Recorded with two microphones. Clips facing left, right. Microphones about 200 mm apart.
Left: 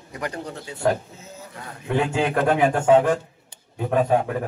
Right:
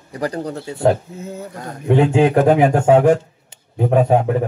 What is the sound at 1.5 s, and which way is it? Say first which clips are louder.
Speech: right 8 dB; 40° right (ahead or behind).